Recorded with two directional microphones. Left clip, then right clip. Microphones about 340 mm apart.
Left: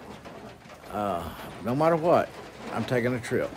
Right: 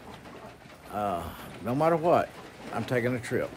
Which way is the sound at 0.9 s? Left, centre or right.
Centre.